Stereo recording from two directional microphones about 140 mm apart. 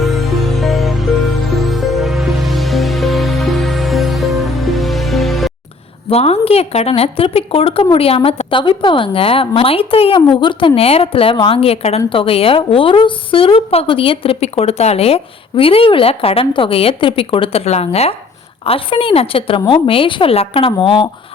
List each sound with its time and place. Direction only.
0.0 s music: centre (ahead or behind)
6.1 s a woman's voice: 45° left (ahead or behind)